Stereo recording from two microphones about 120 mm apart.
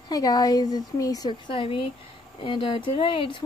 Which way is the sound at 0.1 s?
30° left (ahead or behind).